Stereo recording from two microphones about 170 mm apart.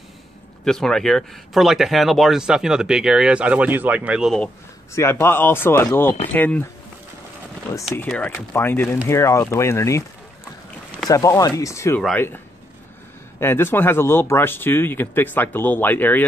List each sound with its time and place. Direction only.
0.7 s speech: 5° left (ahead or behind)
4.9 s speech: 15° left (ahead or behind)
7.7 s speech: 15° left (ahead or behind)
11.1 s speech: 20° left (ahead or behind)
13.4 s speech: 15° left (ahead or behind)